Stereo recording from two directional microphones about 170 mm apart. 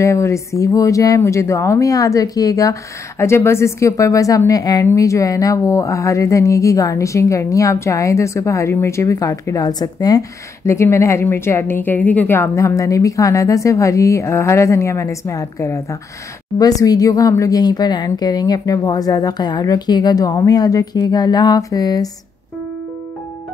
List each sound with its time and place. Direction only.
0.0 s speech: 15° left (ahead or behind)